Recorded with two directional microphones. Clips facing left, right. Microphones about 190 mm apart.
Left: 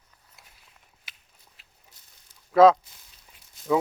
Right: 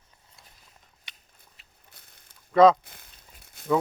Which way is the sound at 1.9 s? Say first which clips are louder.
Right 4 dB; 60° right (ahead or behind).